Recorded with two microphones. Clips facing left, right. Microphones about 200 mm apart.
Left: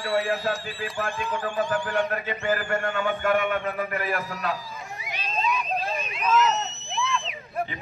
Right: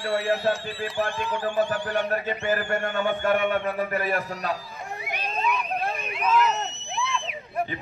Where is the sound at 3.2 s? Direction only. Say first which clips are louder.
Even; 30° right (ahead or behind).